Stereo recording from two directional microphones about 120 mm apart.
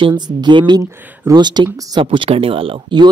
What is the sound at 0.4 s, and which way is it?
Speech, 40° right (ahead or behind).